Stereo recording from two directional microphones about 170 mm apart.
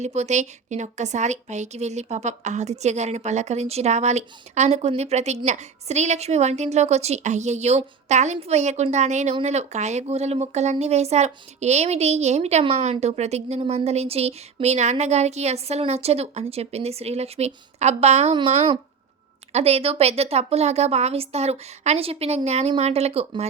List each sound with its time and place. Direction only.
0.0 s a woman's voice: 40° right (ahead or behind)